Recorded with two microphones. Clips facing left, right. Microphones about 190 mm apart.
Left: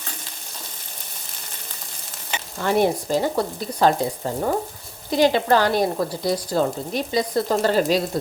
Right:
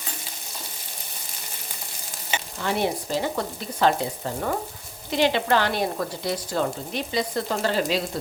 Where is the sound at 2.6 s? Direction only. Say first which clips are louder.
Left 6 dB; 45° left (ahead or behind).